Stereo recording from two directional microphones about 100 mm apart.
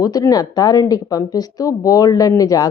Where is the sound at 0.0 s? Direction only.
35° left (ahead or behind).